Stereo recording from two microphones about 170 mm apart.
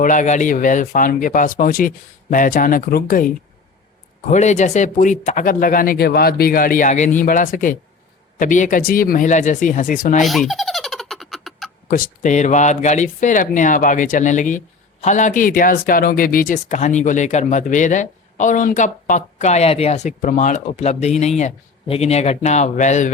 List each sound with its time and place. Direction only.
0.0 s speech: 50° left (ahead or behind)
4.3 s speech: 45° left (ahead or behind)
10.2 s a sound: centre (ahead or behind)
11.9 s speech: 55° left (ahead or behind)